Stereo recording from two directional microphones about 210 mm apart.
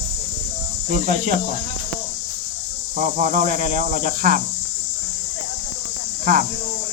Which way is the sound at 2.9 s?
40° right (ahead or behind).